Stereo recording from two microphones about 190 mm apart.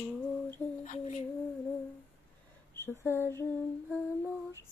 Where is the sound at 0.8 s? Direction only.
40° left (ahead or behind).